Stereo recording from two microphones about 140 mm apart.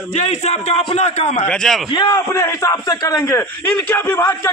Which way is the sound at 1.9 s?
30° left (ahead or behind).